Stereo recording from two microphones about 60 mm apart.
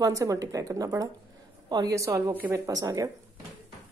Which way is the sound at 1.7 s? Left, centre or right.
Right.